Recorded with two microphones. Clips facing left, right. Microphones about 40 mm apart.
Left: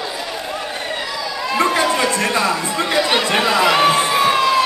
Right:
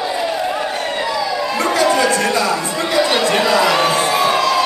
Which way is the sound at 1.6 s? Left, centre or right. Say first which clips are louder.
Right 1 dB; left.